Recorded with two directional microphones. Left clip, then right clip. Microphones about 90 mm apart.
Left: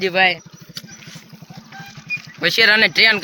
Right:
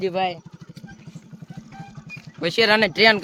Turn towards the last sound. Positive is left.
turn(degrees=-25)  # may be behind; listen again after turning